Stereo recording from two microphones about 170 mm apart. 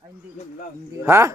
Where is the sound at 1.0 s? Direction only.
15° right (ahead or behind).